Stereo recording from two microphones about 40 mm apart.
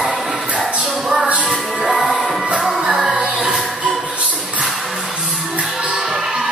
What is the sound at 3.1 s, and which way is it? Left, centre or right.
Music, right.